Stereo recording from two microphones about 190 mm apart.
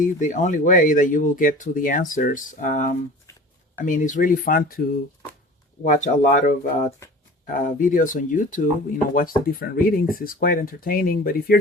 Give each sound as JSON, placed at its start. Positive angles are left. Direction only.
{"t": 0.0, "sound": "speech", "side_deg": 40}
{"t": 5.8, "sound": "speech", "side_deg": 40}
{"t": 7.0, "sound": "a sound", "side_deg": 15}
{"t": 7.4, "sound": "speech", "side_deg": 45}